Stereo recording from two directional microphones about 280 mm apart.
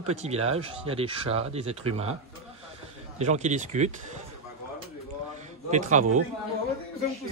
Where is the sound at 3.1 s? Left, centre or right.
Right.